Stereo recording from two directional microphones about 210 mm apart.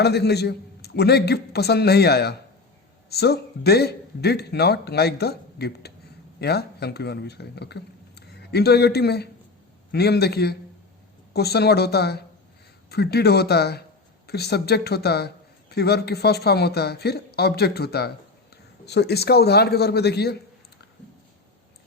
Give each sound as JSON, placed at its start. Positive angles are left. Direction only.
{"t": 0.0, "sound": "a man's voice", "side_deg": 50}